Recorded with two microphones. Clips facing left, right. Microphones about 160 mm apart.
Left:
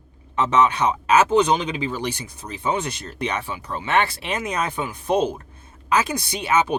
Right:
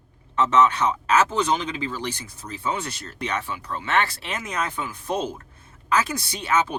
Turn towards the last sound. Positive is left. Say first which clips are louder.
# left 3 dB
turn(degrees=15)  # may be behind; listen again after turning